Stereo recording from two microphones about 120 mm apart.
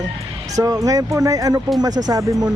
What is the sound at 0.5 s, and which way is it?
Speech, 30° right (ahead or behind).